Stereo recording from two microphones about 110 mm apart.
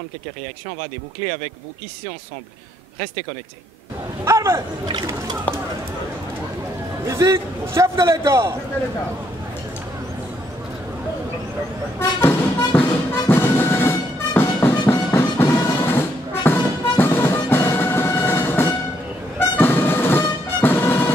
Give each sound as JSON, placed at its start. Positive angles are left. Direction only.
{"t": 4.2, "sound": "speech", "side_deg": -25}
{"t": 5.5, "sound": "speech", "side_deg": 15}
{"t": 7.1, "sound": "a man's voice", "side_deg": -30}
{"t": 12.0, "sound": "music", "side_deg": 20}